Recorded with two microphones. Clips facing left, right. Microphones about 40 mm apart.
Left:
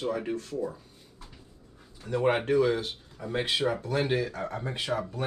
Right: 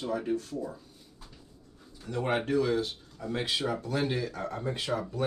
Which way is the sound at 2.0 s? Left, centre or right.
Centre.